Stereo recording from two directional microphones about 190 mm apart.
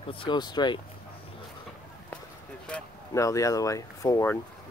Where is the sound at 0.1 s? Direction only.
25° left (ahead or behind).